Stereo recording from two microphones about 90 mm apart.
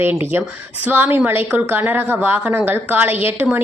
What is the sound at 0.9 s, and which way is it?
A woman's voice, 20° right (ahead or behind).